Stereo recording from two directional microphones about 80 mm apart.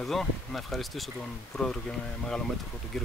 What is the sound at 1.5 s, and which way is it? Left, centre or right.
Speech, left.